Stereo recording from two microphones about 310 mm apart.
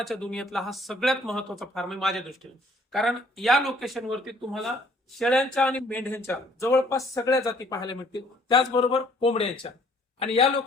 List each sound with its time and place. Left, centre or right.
0.0 s speech: centre